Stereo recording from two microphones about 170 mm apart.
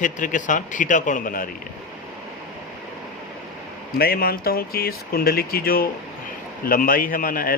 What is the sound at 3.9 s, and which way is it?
Speech, 65° left (ahead or behind).